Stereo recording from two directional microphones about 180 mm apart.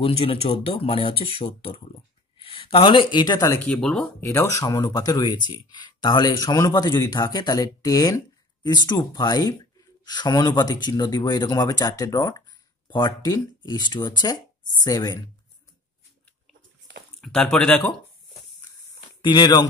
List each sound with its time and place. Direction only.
0.0 s speech: 30° left (ahead or behind); by 4.0 s 5° left (ahead or behind)
4.2 s speech: 15° left (ahead or behind)
17.2 s speech: 5° left (ahead or behind)
19.2 s speech: 20° left (ahead or behind)